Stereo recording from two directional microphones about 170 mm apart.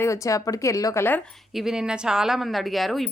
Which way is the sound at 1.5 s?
5° right (ahead or behind).